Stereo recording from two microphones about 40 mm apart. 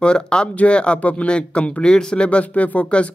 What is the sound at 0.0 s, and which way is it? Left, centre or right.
Speech, left.